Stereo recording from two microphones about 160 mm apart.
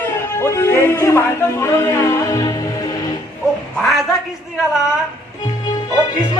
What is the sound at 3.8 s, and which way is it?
Speech, centre (ahead or behind).